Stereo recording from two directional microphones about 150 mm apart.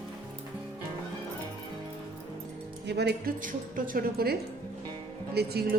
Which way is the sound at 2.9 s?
90° right.